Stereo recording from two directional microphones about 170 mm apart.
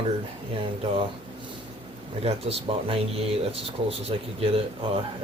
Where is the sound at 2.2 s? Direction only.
35° right (ahead or behind).